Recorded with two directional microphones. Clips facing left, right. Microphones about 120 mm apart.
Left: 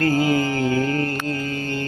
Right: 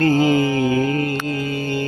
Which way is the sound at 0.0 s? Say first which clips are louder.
Right 3 dB; 25° right (ahead or behind).